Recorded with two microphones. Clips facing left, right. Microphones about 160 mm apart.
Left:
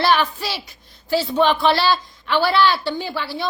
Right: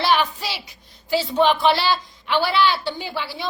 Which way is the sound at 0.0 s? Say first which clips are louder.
Left 2 dB; 15° right (ahead or behind).